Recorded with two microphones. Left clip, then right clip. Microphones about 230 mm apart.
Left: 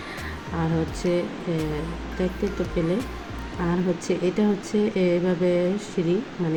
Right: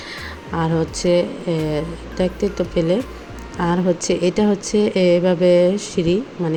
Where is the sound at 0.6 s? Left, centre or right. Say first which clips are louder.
Right 7 dB; right.